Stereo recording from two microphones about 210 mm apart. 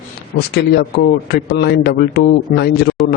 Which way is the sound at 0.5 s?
50° left (ahead or behind).